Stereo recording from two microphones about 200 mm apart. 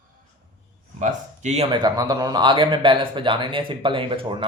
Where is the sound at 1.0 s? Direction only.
35° right (ahead or behind).